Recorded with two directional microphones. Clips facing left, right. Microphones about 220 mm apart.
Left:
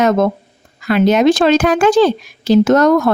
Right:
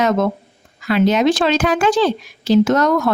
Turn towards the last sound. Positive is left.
turn(degrees=50)  # may be behind; listen again after turning